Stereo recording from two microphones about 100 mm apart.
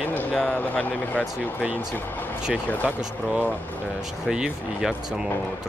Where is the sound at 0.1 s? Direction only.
15° left (ahead or behind).